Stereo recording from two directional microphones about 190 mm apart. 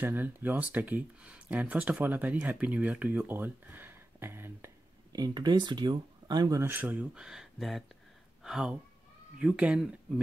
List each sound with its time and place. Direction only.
0.0 s speech: 10° right (ahead or behind)